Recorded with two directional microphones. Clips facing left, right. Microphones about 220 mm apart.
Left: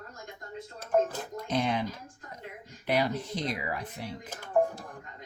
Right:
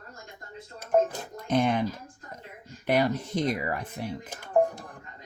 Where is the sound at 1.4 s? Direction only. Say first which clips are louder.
Right 5 dB; 50° right (ahead or behind).